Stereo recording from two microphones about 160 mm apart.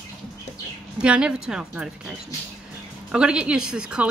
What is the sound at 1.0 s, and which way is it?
Speech, 5° right (ahead or behind).